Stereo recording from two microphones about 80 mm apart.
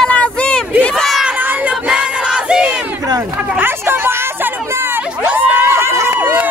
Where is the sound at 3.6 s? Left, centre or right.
Right.